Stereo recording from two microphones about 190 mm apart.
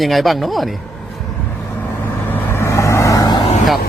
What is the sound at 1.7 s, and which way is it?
Vehicle, 10° left (ahead or behind).